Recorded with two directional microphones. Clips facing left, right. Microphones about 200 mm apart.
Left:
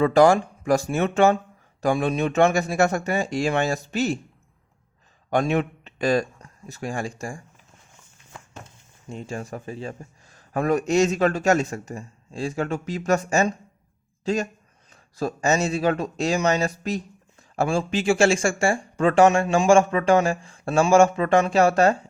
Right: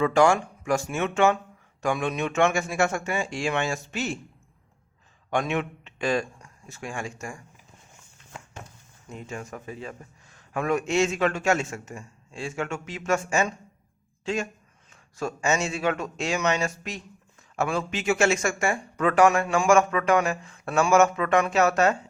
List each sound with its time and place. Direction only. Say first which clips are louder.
0.0 s speech: left 4 dB; 35° left (ahead or behind)
5.3 s speech: left 4 dB; 35° left (ahead or behind)
8.6 s speech: left 5 dB; 30° left (ahead or behind)